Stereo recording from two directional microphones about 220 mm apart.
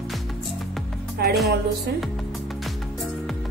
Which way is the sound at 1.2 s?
45° right (ahead or behind).